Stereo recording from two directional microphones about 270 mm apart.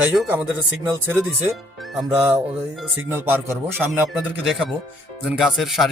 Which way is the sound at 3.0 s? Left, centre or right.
Centre.